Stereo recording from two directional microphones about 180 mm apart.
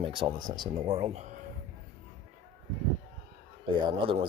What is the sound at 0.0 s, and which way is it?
Speech, 25° right (ahead or behind).